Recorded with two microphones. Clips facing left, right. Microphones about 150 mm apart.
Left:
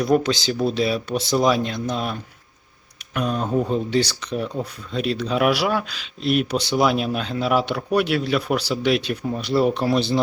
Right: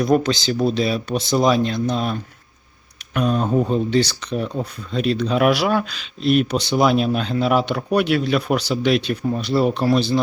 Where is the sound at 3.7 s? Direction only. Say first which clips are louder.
Right 3 dB; 10° left (ahead or behind).